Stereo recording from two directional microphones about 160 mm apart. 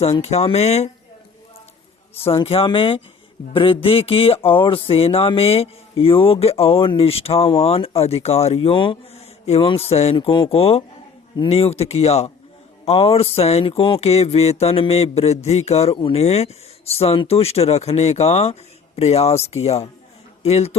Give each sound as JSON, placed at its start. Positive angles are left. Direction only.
{"t": 0.0, "sound": "speech", "side_deg": 40}
{"t": 2.2, "sound": "speech", "side_deg": 35}